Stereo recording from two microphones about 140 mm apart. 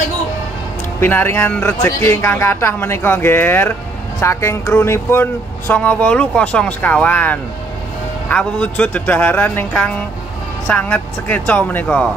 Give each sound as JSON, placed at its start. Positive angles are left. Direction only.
{"t": 1.0, "sound": "speech", "side_deg": 15}